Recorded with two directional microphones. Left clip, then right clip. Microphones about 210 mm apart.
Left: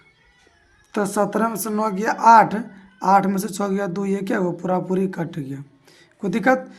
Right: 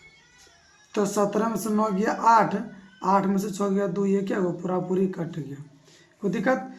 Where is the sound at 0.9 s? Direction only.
40° left (ahead or behind).